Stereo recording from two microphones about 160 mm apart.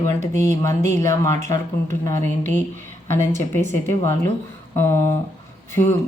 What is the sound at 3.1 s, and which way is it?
Speech, 15° left (ahead or behind).